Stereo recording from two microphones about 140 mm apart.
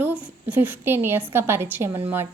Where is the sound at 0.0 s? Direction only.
10° right (ahead or behind).